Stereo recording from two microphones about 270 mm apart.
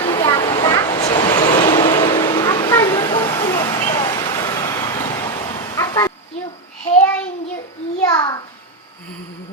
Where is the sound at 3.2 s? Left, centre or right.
Centre.